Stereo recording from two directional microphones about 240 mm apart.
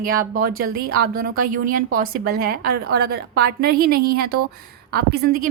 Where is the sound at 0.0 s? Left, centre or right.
Right.